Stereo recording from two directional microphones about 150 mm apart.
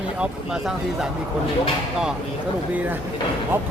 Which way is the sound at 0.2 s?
5° right (ahead or behind).